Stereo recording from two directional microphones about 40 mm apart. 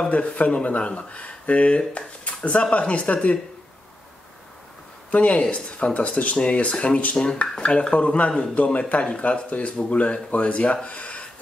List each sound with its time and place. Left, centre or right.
0.1 s speech: left
5.1 s speech: left